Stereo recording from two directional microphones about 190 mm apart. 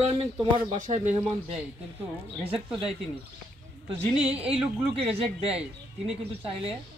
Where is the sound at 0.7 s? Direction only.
40° right (ahead or behind).